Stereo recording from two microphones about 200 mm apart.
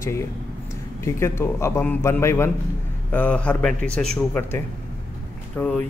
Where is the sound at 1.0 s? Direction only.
10° left (ahead or behind).